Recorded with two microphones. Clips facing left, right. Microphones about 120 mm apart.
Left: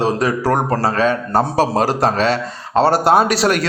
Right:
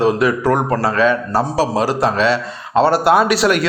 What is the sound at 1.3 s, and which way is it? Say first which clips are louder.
A man's voice: left 1 dB; 50° left (ahead or behind).